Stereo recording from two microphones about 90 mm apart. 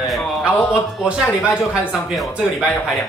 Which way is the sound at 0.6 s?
5° right (ahead or behind).